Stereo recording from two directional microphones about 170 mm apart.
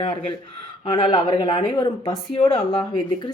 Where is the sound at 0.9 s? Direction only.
25° left (ahead or behind).